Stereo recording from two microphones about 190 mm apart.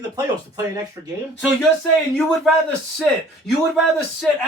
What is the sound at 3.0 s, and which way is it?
A man's voice, centre (ahead or behind).